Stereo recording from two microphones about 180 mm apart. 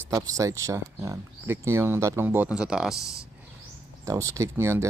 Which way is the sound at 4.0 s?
15° right (ahead or behind).